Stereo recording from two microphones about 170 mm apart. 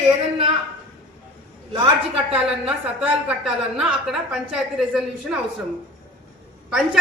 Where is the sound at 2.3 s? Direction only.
5° right (ahead or behind).